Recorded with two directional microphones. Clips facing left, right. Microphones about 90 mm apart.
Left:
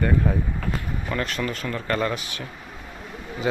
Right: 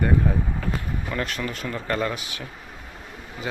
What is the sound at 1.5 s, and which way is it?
Speech, 20° right (ahead or behind).